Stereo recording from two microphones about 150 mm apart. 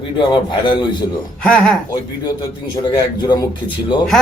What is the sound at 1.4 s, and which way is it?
Speech, 5° left (ahead or behind).